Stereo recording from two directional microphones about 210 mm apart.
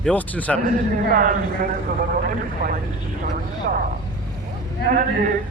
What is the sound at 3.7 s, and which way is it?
Speech, 45° right (ahead or behind).